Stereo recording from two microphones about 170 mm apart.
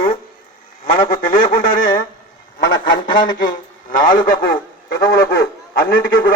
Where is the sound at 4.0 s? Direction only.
55° left (ahead or behind).